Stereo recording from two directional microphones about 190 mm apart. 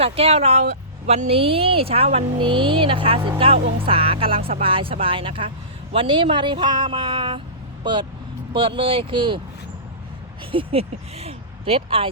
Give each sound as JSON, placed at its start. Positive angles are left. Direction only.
{"t": 0.0, "sound": "speech", "side_deg": -30}
{"t": 8.5, "sound": "speech", "side_deg": -30}
{"t": 10.5, "sound": "speech", "side_deg": -30}